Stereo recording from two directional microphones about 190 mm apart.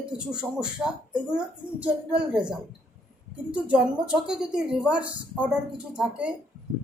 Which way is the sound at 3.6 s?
5° right (ahead or behind).